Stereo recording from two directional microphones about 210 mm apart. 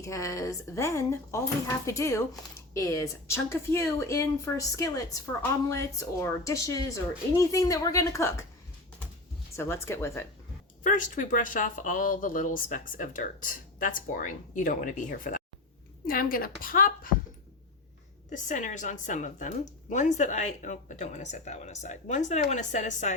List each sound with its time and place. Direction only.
0.0 s speech: 15° left (ahead or behind)
9.6 s speech: 10° left (ahead or behind)
10.8 s a woman's voice: 35° left (ahead or behind)
18.3 s speech: 35° left (ahead or behind)